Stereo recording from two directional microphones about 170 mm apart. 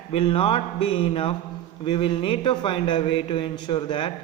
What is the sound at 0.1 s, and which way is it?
Speech, 30° left (ahead or behind).